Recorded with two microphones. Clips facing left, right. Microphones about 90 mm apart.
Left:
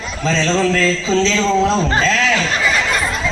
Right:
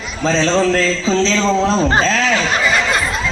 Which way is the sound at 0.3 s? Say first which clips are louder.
Right 2 dB; 35° right (ahead or behind).